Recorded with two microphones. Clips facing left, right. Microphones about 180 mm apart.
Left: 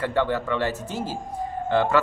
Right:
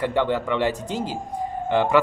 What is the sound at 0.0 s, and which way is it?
Speech, 15° right (ahead or behind).